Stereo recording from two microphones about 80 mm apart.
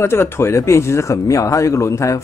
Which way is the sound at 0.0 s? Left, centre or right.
Left.